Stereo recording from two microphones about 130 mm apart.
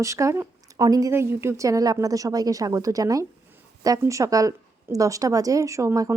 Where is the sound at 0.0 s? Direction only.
25° right (ahead or behind).